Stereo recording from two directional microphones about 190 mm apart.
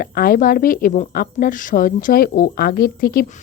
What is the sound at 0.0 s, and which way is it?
A woman's voice, 50° left (ahead or behind).